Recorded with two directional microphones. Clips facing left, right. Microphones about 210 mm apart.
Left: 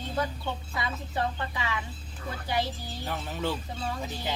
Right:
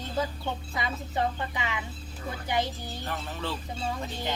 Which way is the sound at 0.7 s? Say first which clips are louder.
Right 2 dB; 20° right (ahead or behind).